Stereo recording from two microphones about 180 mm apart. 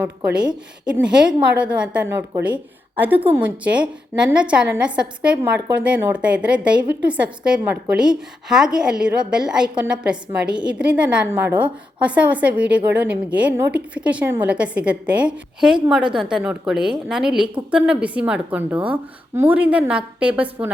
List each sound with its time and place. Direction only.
0.3 s a woman's voice: 5° right (ahead or behind)